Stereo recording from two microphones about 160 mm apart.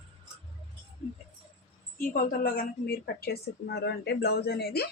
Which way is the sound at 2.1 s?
65° left (ahead or behind).